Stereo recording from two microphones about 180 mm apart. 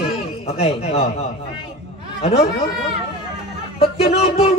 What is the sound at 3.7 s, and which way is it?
Speech, 35° left (ahead or behind).